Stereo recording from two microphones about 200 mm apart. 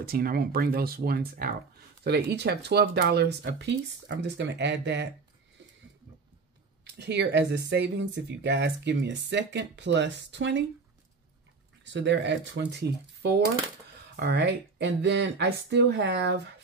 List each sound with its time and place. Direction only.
0.0 s speech: 50° right (ahead or behind)
6.8 s speech: 55° right (ahead or behind)
11.8 s speech: 60° right (ahead or behind)